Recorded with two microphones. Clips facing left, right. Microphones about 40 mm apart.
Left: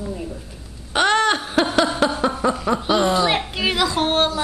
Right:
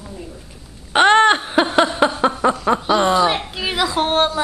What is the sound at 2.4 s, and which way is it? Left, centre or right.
Speech, right.